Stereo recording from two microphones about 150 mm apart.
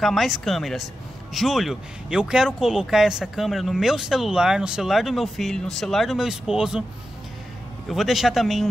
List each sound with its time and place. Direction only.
0.0 s speech: centre (ahead or behind)
7.9 s speech: centre (ahead or behind)